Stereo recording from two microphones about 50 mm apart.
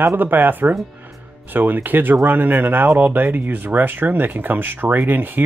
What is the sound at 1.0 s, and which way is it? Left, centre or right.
Music, right.